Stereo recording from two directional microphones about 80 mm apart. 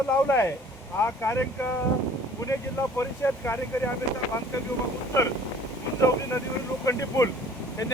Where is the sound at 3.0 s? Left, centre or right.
Left.